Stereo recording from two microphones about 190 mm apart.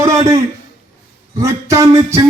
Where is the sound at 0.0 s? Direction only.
15° right (ahead or behind).